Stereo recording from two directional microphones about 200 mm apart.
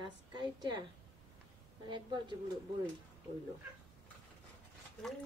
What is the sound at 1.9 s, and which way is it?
Speech, 20° right (ahead or behind).